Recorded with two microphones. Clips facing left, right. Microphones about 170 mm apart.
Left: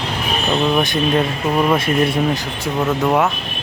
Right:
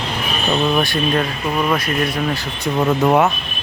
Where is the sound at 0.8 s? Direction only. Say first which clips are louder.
Left 1 dB; 15° left (ahead or behind).